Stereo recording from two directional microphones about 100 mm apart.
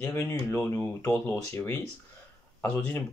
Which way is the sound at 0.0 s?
25° left (ahead or behind).